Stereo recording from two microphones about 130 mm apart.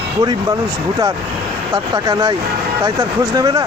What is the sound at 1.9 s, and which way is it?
Speech, 30° right (ahead or behind).